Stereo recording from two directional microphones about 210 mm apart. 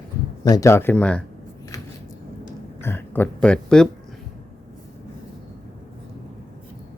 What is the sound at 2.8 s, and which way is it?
Speech, 10° left (ahead or behind).